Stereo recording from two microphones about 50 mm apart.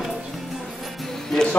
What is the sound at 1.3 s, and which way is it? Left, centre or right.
Speech, centre.